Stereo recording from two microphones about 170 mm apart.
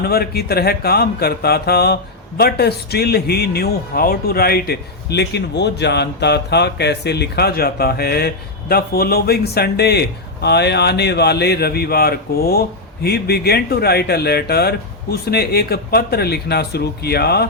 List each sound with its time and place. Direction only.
0.0 s a man's voice: 65° left (ahead or behind)